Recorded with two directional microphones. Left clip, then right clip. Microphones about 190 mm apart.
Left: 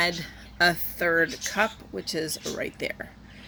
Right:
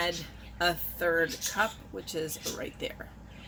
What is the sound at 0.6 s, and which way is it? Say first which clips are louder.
Speech: left 6 dB; 40° left (ahead or behind).